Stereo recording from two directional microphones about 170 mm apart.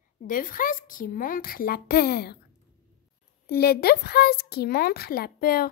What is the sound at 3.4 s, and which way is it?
Speech, 65° left (ahead or behind).